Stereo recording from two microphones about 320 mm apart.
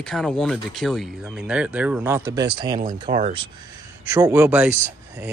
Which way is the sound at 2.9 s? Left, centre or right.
Centre.